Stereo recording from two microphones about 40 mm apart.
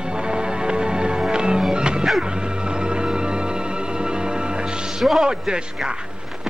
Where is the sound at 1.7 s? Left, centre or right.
Right.